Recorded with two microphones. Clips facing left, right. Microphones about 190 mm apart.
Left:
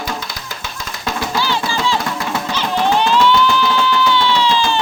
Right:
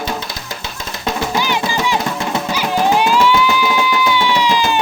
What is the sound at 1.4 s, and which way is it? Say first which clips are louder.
Music: right 1 dB; 15° right (ahead or behind).